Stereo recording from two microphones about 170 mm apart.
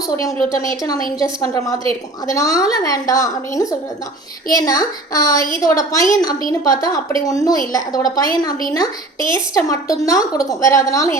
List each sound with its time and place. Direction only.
0.6 s a woman's voice: 20° left (ahead or behind)
9.3 s a woman's voice: 20° left (ahead or behind)